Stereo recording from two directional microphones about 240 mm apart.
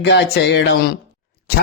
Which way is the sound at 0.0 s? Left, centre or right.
Left.